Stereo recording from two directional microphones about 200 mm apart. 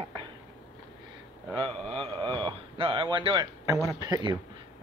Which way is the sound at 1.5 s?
25° right (ahead or behind).